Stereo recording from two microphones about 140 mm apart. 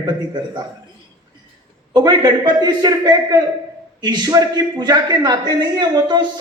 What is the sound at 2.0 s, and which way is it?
A man's voice, 30° right (ahead or behind).